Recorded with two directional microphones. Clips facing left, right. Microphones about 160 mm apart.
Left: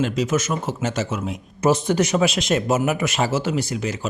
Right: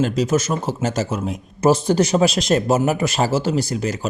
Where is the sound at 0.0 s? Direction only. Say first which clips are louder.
Right 3 dB; 35° right (ahead or behind).